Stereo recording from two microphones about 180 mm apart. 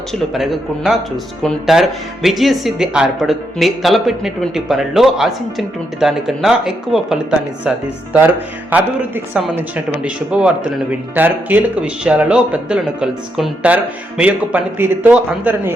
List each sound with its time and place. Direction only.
0.1 s speech: centre (ahead or behind)
8.7 s speech: 10° right (ahead or behind)